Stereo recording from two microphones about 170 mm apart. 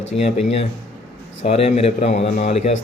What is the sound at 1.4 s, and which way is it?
Speech, 35° left (ahead or behind).